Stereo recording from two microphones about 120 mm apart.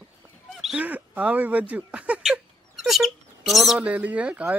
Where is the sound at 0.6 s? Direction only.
5° right (ahead or behind).